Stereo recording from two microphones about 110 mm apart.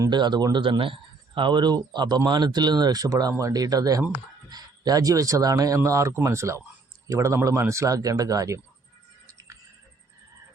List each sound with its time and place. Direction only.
0.1 s speech: 40° right (ahead or behind)